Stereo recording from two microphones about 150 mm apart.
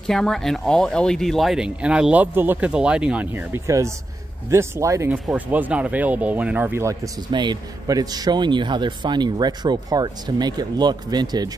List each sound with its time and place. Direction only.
0.0 s a man's voice: 5° left (ahead or behind); by 7.0 s 15° right (ahead or behind)
7.2 s a man's voice: 30° right (ahead or behind)